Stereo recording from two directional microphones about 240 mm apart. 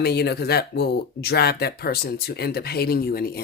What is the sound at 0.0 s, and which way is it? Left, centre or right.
Speech, left.